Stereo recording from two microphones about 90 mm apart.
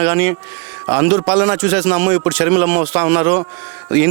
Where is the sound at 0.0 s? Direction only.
25° right (ahead or behind).